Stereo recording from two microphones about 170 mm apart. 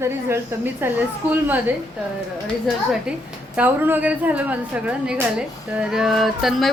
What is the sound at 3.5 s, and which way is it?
A woman's voice, 10° right (ahead or behind).